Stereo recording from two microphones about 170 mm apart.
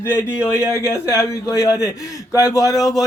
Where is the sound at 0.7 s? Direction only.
15° left (ahead or behind).